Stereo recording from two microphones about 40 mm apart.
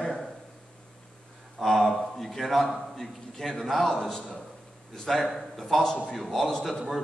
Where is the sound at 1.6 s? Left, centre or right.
Centre.